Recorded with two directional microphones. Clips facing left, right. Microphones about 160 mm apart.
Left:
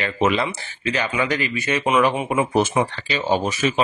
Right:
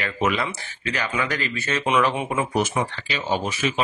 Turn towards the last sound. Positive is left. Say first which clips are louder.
# left 4 dB
turn(degrees=40)  # may be behind; listen again after turning